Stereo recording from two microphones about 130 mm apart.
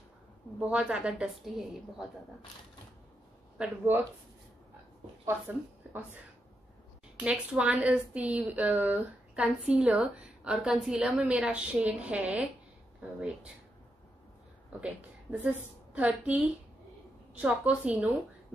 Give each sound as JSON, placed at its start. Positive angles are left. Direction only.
{"t": 0.6, "sound": "a woman's voice", "side_deg": -10}
{"t": 3.5, "sound": "a woman's voice", "side_deg": -10}
{"t": 5.2, "sound": "a woman's voice", "side_deg": -15}
{"t": 7.2, "sound": "a woman's voice", "side_deg": -10}
{"t": 15.3, "sound": "a woman's voice", "side_deg": -10}